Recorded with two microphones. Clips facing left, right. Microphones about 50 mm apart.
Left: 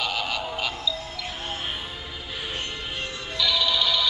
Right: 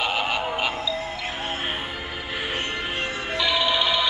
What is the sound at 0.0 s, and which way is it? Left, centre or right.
Synthetic singing, right.